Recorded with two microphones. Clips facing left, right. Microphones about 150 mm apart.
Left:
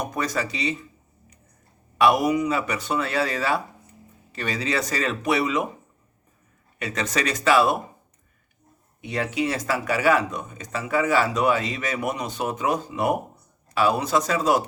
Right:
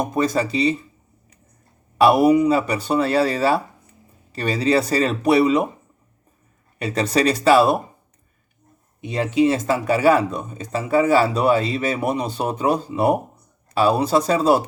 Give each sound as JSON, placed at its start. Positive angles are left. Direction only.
{"t": 0.0, "sound": "speech", "side_deg": -25}
{"t": 2.0, "sound": "speech", "side_deg": -30}
{"t": 6.7, "sound": "speech", "side_deg": -30}
{"t": 9.0, "sound": "speech", "side_deg": -20}